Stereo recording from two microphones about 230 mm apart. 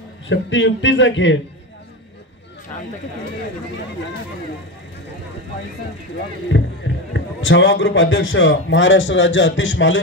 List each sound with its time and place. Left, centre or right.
0.3 s a man's voice: left
6.5 s a man's voice: left